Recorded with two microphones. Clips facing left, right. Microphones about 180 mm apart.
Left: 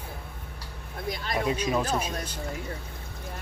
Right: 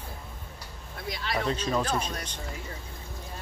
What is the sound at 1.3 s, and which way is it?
Speech, 10° left (ahead or behind).